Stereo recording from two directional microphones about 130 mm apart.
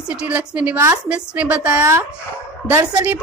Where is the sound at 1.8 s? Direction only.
20° right (ahead or behind).